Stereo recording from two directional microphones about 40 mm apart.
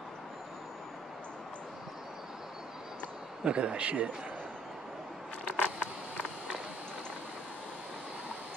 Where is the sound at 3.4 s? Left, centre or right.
Right.